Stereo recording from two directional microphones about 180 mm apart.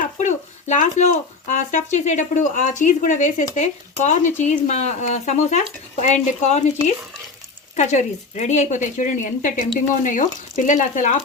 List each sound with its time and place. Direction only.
0.2 s a woman's voice: 40° left (ahead or behind)